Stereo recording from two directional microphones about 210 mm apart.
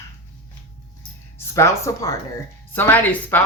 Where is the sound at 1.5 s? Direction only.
15° left (ahead or behind).